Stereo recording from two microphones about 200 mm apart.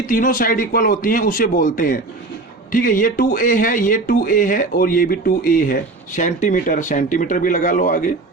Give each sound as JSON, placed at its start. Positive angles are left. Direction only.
{"t": 0.1, "sound": "speech", "side_deg": 45}